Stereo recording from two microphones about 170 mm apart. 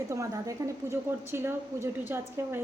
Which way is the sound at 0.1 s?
20° right (ahead or behind).